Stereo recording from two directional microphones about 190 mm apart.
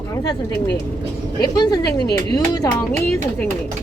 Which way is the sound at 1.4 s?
20° left (ahead or behind).